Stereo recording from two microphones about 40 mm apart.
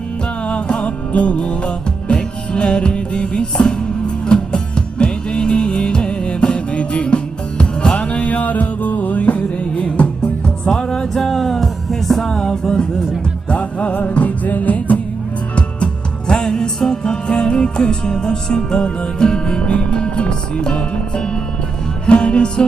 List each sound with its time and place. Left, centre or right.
0.4 s music: left
10.7 s music: centre
12.3 s music: centre
13.5 s music: left
15.5 s music: left